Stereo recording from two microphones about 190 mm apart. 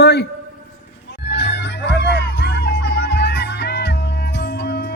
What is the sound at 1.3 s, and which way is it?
Music, 65° left (ahead or behind).